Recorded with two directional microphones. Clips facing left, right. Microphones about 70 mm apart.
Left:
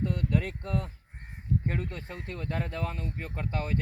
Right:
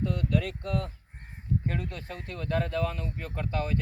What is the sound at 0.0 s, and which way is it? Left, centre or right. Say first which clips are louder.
Speech: right 1 dB; left.